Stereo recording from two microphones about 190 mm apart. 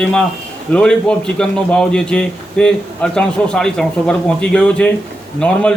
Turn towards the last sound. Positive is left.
turn(degrees=5)  # may be behind; listen again after turning